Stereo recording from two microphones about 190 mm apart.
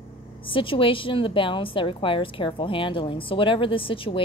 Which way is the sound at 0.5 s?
25° left (ahead or behind).